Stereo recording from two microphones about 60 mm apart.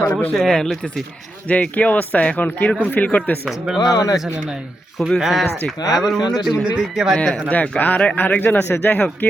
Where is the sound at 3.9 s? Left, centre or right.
Left.